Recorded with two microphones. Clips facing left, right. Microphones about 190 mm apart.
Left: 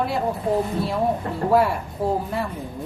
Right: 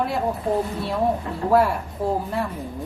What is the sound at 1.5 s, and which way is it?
Speech, centre (ahead or behind).